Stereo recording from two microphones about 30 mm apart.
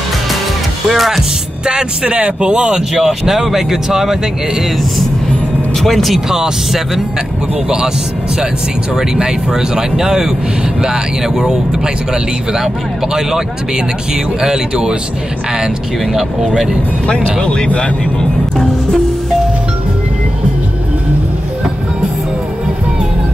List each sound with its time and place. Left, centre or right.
0.8 s speech: centre
1.7 s speech: right
2.9 s speech: centre
5.9 s speech: centre
8.9 s speech: centre
14.4 s speech: right
17.4 s speech: left